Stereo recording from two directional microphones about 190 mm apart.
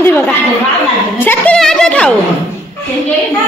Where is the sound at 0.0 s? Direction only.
10° left (ahead or behind).